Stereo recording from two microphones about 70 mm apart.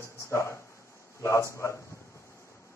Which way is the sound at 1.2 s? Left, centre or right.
Left.